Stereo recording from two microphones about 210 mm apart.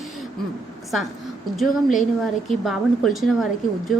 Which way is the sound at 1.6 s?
Centre (ahead or behind).